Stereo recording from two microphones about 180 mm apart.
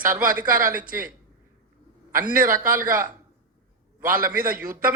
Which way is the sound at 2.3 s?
50° right (ahead or behind).